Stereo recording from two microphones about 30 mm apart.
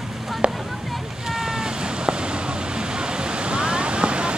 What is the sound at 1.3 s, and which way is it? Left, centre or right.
Vehicle, centre.